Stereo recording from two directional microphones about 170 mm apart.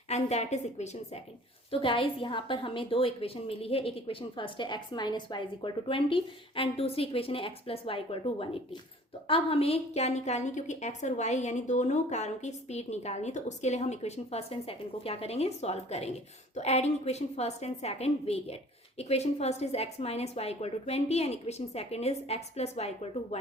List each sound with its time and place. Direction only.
0.1 s a woman's voice: 40° left (ahead or behind)